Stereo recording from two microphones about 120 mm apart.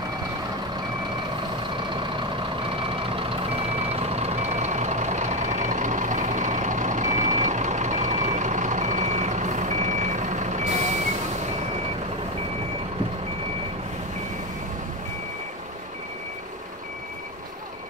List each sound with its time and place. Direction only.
3.2 s reversing beeps: 50° right (ahead or behind); by 10.9 s 80° right